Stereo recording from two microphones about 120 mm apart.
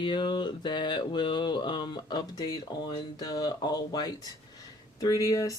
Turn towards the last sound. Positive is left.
turn(degrees=30)  # may be behind; listen again after turning